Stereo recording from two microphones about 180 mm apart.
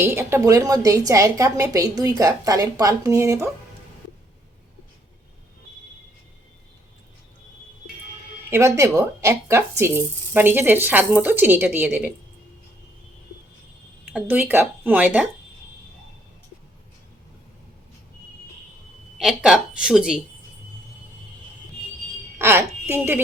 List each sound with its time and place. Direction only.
0.0 s a woman's voice: 15° right (ahead or behind)
8.4 s speech: 15° right (ahead or behind)
14.1 s speech: 10° right (ahead or behind)
19.2 s speech: centre (ahead or behind)
22.4 s a woman's voice: 15° right (ahead or behind)